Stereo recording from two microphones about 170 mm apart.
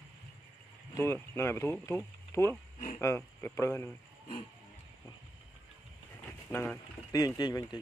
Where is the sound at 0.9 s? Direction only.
15° left (ahead or behind).